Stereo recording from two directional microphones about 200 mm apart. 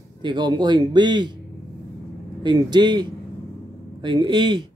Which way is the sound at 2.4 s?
20° right (ahead or behind).